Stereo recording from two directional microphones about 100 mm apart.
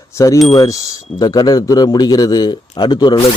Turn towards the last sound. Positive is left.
turn(degrees=45)  # may be behind; listen again after turning